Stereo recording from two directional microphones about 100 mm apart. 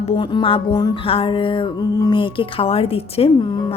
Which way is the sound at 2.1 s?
60° left (ahead or behind).